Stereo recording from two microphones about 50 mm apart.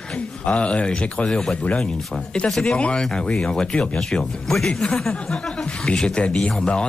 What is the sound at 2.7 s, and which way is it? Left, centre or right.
Speech, left.